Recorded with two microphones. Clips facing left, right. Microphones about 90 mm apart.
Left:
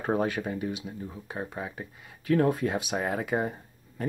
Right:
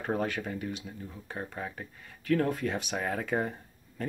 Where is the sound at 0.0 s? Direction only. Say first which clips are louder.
Left 4 dB; 25° left (ahead or behind).